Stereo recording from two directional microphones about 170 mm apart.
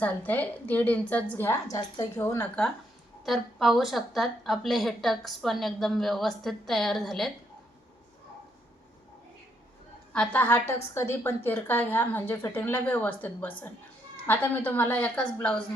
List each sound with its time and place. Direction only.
0.0 s a woman's voice: 10° left (ahead or behind)
3.2 s a woman's voice: centre (ahead or behind)
10.1 s a woman's voice: 10° left (ahead or behind)